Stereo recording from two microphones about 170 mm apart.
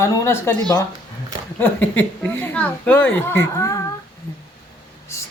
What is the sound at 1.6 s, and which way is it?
A woman's voice, 10° left (ahead or behind).